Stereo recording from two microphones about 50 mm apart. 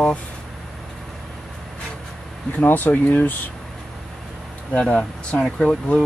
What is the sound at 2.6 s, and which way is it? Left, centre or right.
Speech, left.